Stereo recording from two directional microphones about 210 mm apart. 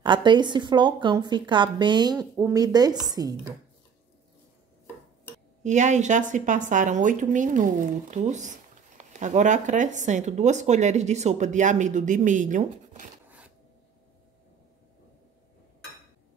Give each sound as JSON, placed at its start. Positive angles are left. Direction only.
{"t": 0.0, "sound": "a woman's voice", "side_deg": -20}
{"t": 5.6, "sound": "a woman's voice", "side_deg": -35}